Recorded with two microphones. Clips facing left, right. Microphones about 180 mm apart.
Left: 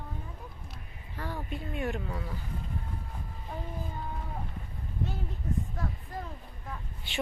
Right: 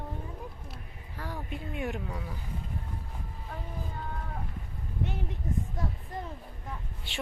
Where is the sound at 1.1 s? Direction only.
10° right (ahead or behind).